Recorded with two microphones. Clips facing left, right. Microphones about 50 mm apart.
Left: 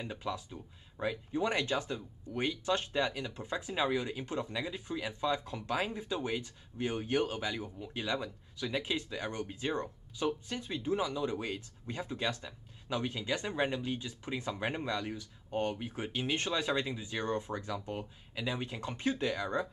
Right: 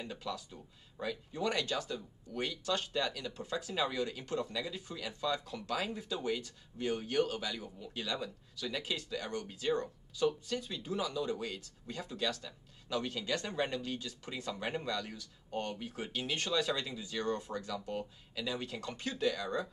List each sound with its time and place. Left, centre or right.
0.0 s speech: left